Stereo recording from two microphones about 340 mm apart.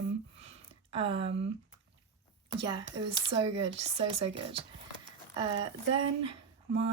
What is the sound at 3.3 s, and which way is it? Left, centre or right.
Speech, centre.